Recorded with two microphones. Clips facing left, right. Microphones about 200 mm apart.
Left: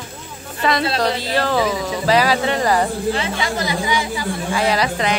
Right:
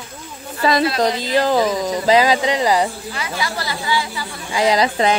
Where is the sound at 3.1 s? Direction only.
25° left (ahead or behind).